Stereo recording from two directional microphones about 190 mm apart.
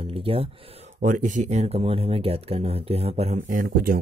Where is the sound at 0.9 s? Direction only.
40° right (ahead or behind).